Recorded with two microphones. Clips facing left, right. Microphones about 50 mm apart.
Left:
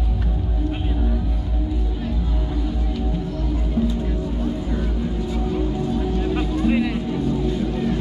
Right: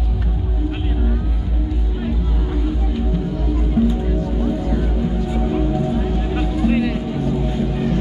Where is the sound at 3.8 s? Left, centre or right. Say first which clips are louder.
Right 5 dB; centre.